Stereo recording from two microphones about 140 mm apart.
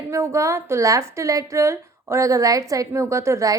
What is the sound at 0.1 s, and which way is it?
A woman's voice, 20° right (ahead or behind).